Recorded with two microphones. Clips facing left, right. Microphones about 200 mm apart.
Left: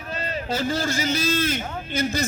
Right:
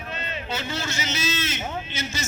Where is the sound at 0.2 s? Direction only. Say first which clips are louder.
Left 7 dB; 40° left (ahead or behind).